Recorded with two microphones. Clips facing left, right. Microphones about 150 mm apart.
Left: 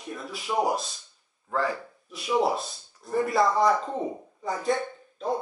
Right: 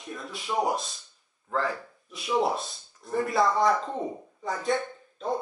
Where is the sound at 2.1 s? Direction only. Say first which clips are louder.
Left 1 dB; centre (ahead or behind).